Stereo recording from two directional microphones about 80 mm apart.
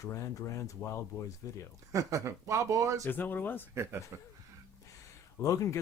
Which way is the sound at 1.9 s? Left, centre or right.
Right.